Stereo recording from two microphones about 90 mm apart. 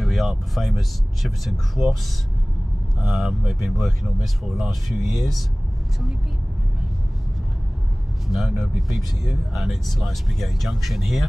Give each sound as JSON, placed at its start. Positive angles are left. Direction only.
{"t": 0.0, "sound": "speech", "side_deg": 0}
{"t": 3.0, "sound": "speech", "side_deg": 0}
{"t": 8.3, "sound": "speech", "side_deg": 0}